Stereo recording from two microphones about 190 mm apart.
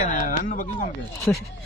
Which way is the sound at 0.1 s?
45° left (ahead or behind).